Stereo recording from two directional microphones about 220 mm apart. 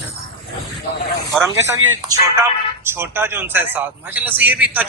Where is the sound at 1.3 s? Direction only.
10° right (ahead or behind).